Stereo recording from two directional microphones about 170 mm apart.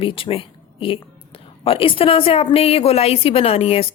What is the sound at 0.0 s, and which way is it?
A woman's voice, 30° left (ahead or behind).